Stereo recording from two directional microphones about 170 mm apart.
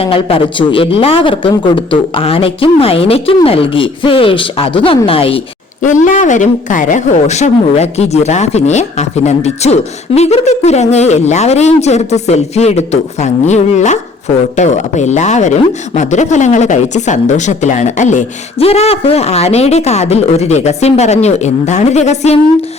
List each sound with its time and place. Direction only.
0.0 s speech: 35° left (ahead or behind)
5.8 s speech: 50° left (ahead or behind)